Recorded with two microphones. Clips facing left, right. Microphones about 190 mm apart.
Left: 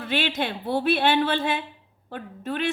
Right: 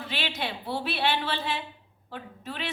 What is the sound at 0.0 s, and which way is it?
A woman's voice, 55° left (ahead or behind).